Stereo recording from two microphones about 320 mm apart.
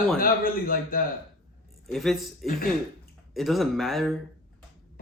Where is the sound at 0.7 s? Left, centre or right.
Left.